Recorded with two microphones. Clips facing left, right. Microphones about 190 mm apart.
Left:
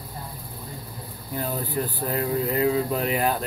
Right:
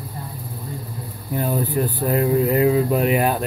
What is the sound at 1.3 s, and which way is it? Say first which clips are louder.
Speech: right 6 dB; 15° right (ahead or behind).